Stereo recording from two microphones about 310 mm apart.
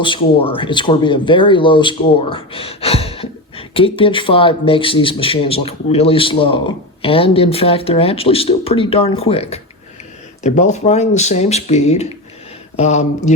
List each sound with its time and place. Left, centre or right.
0.0 s speech: centre